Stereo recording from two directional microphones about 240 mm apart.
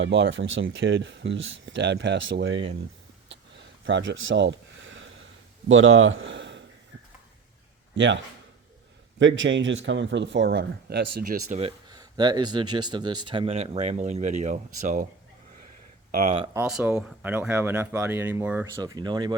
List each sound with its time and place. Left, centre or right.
0.0 s speech: right
3.8 s a sound: right
5.6 s speech: right
7.9 s speech: right
11.5 s speech: right
16.6 s speech: centre